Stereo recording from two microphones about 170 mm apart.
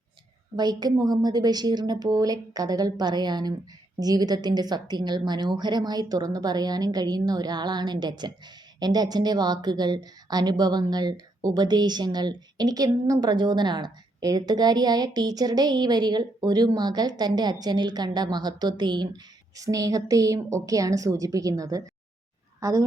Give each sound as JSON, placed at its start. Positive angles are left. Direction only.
{"t": 0.5, "sound": "a woman's voice", "side_deg": -25}